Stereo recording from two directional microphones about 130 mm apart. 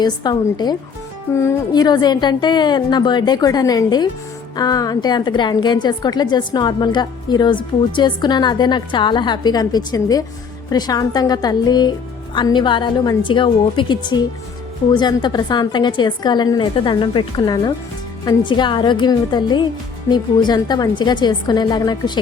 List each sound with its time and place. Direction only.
0.0 s a woman's voice: 35° left (ahead or behind)
1.3 s a woman's voice: 20° left (ahead or behind)